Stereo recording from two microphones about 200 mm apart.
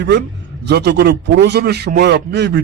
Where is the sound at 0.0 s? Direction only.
60° right (ahead or behind).